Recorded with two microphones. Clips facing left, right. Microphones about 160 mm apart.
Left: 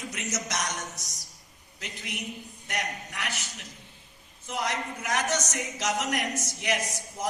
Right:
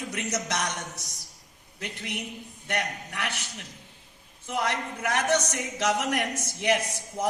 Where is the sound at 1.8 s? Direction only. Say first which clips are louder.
Right 3 dB; 60° right (ahead or behind).